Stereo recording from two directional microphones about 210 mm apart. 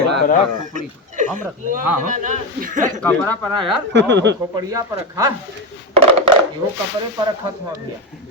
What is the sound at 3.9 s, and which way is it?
Speech, 55° right (ahead or behind).